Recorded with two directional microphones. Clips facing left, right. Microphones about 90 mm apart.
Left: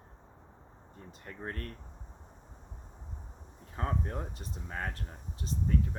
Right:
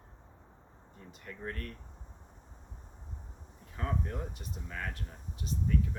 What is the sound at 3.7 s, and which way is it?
Speech, 35° left (ahead or behind).